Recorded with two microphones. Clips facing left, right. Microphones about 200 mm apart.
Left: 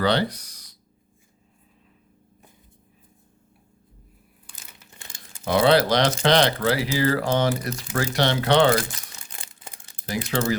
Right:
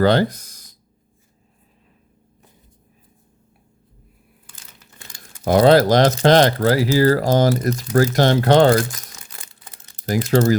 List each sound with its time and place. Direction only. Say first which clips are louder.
0.0 s a sound: right 6 dB; 45° right (ahead or behind)
4.9 s crumpling: right 2 dB; 25° left (ahead or behind)
5.5 s speech: right 6 dB; 45° right (ahead or behind)
10.1 s speech: right 8 dB; 40° right (ahead or behind)